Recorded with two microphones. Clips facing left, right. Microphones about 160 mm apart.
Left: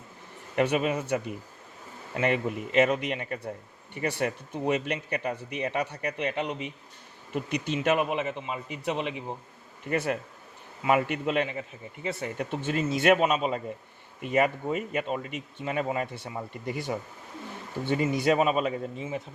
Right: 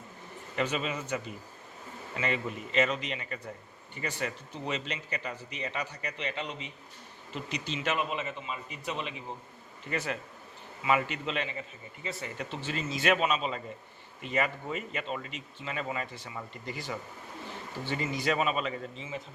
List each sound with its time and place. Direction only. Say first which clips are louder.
0.5 s speech: left 7 dB; 60° left (ahead or behind)
9.9 s speech: left 6 dB; 55° left (ahead or behind)
16.6 s speech: left 7 dB; 60° left (ahead or behind)
18.1 s speech: left 5 dB; 50° left (ahead or behind)